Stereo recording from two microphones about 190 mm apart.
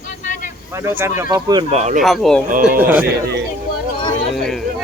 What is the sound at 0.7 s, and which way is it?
Speech, 15° right (ahead or behind).